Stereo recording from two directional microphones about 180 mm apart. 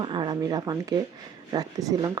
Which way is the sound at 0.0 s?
25° right (ahead or behind).